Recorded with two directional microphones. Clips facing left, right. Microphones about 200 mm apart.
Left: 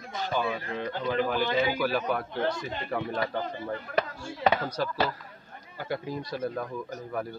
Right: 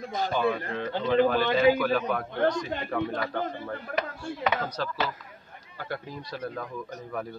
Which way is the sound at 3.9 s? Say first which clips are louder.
Left 2 dB; 55° right (ahead or behind).